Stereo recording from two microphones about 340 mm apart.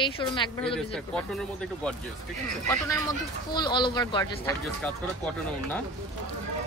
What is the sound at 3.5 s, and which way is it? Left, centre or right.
Speech, centre.